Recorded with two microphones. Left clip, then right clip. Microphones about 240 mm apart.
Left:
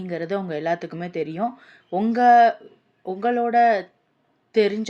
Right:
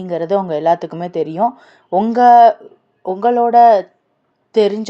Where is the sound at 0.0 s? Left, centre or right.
Centre.